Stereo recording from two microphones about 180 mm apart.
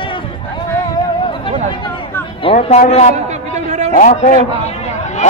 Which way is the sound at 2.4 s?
35° left (ahead or behind).